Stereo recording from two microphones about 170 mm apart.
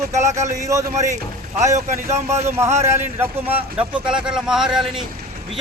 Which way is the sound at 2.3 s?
15° right (ahead or behind).